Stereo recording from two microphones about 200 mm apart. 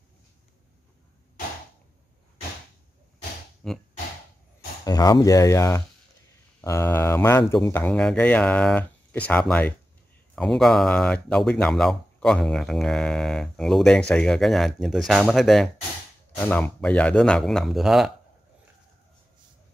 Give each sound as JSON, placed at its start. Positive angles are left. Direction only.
{"t": 3.6, "sound": "speech", "side_deg": 0}
{"t": 4.8, "sound": "speech", "side_deg": 20}